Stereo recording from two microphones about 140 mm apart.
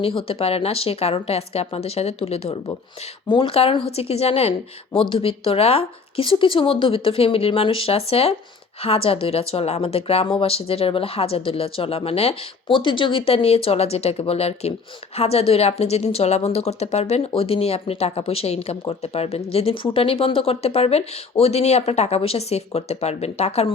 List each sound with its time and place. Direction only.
0.0 s a woman's voice: 40° left (ahead or behind)